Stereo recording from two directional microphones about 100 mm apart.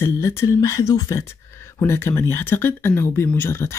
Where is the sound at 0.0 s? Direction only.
30° left (ahead or behind).